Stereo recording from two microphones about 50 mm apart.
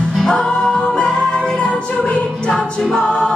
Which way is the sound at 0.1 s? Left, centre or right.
Centre.